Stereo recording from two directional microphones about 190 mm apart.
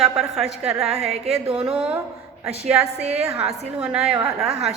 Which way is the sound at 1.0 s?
30° right (ahead or behind).